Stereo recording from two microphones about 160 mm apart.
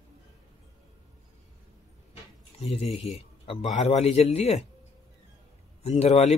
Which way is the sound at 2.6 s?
40° left (ahead or behind).